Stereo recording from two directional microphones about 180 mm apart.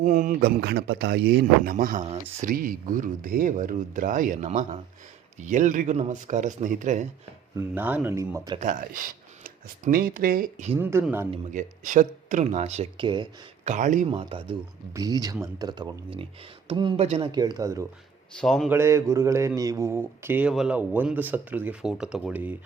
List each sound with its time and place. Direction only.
0.0 s speech: 50° right (ahead or behind); by 1.7 s 70° right (ahead or behind)
1.7 s speech: 50° right (ahead or behind)
7.5 s speech: 10° right (ahead or behind)
8.6 s speech: 50° right (ahead or behind)
10.8 s speech: 15° right (ahead or behind)
11.5 s speech: 45° right (ahead or behind); by 13.2 s 25° right (ahead or behind)
13.7 s speech: 45° right (ahead or behind)
14.1 s speech: 30° right (ahead or behind)
18.3 s a man's voice: centre (ahead or behind)
18.7 s speech: 15° right (ahead or behind)